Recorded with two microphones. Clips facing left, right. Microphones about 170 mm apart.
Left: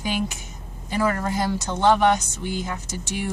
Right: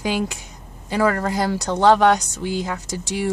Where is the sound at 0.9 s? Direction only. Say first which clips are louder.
Right 4 dB; 90° right.